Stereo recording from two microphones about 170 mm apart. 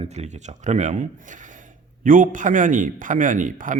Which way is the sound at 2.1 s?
50° right (ahead or behind).